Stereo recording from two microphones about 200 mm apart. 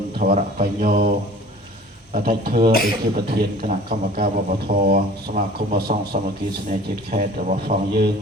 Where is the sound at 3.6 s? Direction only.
50° right (ahead or behind).